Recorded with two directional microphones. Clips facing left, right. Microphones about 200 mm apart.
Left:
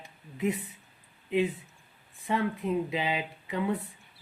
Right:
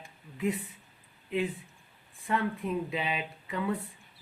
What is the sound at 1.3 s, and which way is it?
Speech, 20° left (ahead or behind).